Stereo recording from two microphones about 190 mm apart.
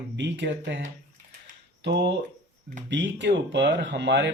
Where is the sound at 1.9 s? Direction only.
65° right (ahead or behind).